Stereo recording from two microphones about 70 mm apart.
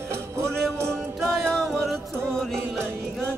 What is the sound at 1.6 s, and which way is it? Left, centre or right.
Music, centre.